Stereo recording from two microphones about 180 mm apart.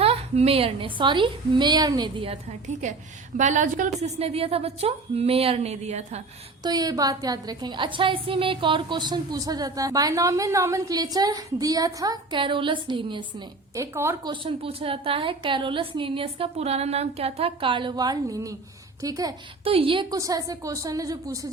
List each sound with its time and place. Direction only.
0.0 s a woman's voice: 35° right (ahead or behind)
3.3 s a woman's voice: 40° right (ahead or behind)
6.6 s a woman's voice: 20° right (ahead or behind)
13.7 s a woman's voice: 15° right (ahead or behind)
14.4 s a woman's voice: 30° right (ahead or behind)
19.6 s a woman's voice: 30° right (ahead or behind)